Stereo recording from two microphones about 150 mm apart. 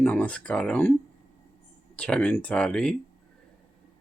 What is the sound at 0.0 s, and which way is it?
Speech, 10° left (ahead or behind).